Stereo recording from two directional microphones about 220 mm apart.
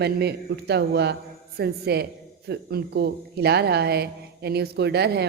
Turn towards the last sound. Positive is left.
turn(degrees=-45)  # may be behind; listen again after turning